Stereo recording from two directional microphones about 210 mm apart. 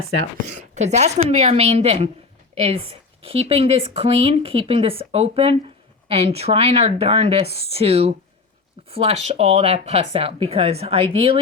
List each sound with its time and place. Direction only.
0.4 s a woman's voice: 35° right (ahead or behind)